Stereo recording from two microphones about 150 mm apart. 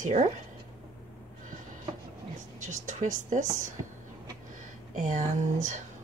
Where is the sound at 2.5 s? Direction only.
55° right (ahead or behind).